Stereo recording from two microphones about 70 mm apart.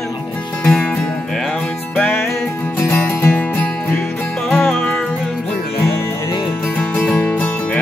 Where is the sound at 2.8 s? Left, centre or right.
Left.